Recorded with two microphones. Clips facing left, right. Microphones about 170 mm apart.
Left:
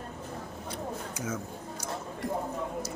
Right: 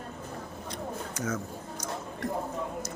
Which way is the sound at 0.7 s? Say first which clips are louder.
Even; 10° left (ahead or behind).